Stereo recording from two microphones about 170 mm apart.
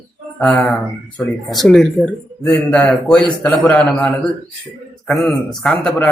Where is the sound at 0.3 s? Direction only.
5° left (ahead or behind).